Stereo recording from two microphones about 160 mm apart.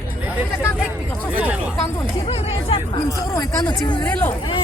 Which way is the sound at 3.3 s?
20° left (ahead or behind).